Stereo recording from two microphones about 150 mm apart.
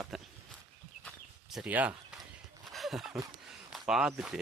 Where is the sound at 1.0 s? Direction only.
Centre (ahead or behind).